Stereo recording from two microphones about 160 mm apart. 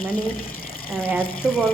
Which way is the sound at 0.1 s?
65° left (ahead or behind).